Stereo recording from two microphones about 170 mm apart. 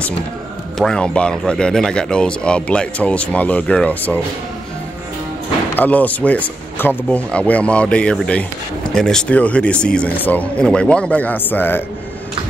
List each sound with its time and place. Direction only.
0.7 s speech: 5° left (ahead or behind)
5.8 s speech: 10° left (ahead or behind)